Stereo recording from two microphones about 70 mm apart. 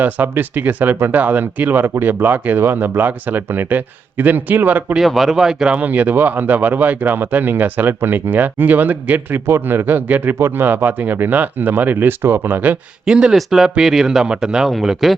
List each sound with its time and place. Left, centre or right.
0.0 s speech: right
4.9 s speech: centre
5.7 s speech: right
13.1 s speech: centre